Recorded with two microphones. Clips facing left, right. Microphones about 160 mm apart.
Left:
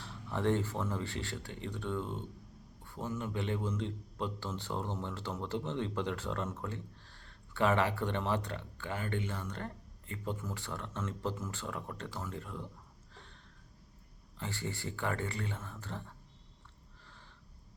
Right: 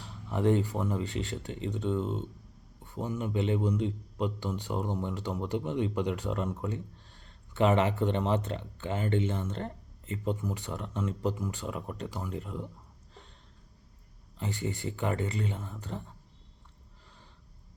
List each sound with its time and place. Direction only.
0.0 s a man's voice: 15° right (ahead or behind)
14.3 s speech: 20° right (ahead or behind)